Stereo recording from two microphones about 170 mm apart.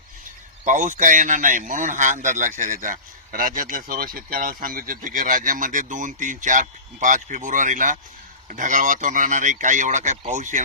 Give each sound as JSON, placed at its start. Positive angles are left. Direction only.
{"t": 0.6, "sound": "speech", "side_deg": -50}